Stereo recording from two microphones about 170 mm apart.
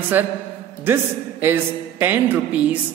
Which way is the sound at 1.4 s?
10° right (ahead or behind).